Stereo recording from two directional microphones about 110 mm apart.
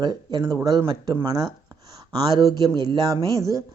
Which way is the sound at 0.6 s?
35° right (ahead or behind).